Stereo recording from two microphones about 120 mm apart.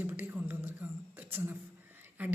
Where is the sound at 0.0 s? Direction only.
15° right (ahead or behind).